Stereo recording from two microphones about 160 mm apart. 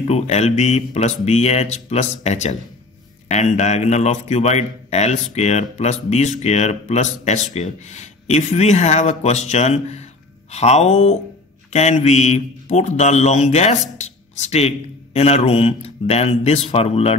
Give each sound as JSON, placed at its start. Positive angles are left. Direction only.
{"t": 0.0, "sound": "a man's voice", "side_deg": 45}